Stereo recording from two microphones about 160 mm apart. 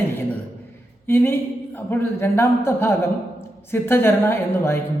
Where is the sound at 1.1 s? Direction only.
15° left (ahead or behind).